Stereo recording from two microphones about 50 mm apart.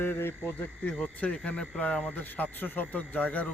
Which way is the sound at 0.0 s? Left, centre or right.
Left.